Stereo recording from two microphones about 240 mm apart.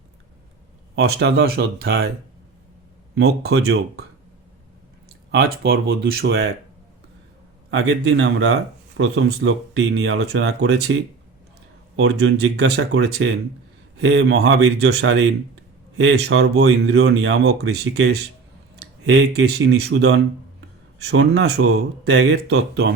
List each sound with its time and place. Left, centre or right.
1.1 s speech: right
3.2 s speech: right
5.3 s speech: right
7.7 s speech: right
12.0 s speech: right
18.8 s speech: right